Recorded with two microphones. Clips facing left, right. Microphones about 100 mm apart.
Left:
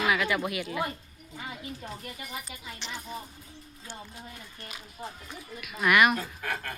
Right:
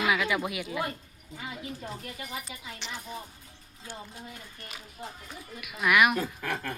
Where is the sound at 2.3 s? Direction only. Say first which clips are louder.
Right 1 dB; 10° right (ahead or behind).